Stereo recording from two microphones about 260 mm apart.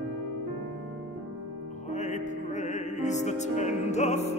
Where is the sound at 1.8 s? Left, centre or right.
Left.